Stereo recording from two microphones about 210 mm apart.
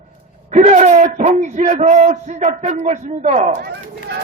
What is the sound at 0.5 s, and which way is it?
A man's voice, 35° right (ahead or behind).